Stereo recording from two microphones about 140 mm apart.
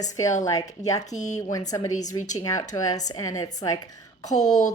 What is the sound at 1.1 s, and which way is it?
Speech, 55° left (ahead or behind).